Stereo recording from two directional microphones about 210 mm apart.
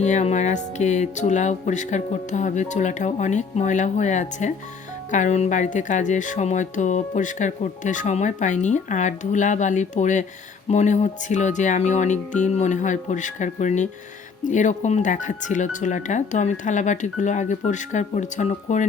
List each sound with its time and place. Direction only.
0.0 s speech: 35° left (ahead or behind)